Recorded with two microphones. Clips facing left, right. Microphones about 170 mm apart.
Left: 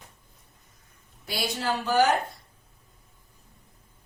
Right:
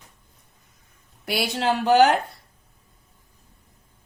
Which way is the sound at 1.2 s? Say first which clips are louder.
Right 5 dB; 70° right (ahead or behind).